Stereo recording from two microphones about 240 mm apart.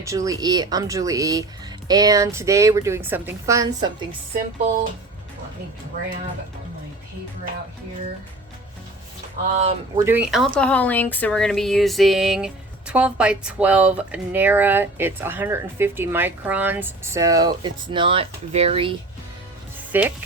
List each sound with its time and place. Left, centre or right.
0.0 s speech: centre
9.6 s speech: right
10.0 s speech: centre; by 18.9 s right
19.9 s speech: centre